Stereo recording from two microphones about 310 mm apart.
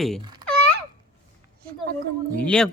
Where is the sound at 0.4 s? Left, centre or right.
Centre.